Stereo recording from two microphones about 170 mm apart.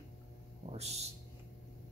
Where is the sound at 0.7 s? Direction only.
40° right (ahead or behind).